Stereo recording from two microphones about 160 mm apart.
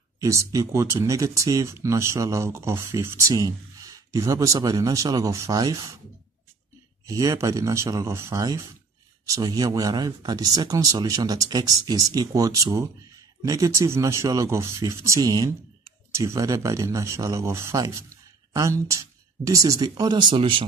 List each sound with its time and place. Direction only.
0.2 s speech: 20° right (ahead or behind)
7.1 s speech: 20° right (ahead or behind)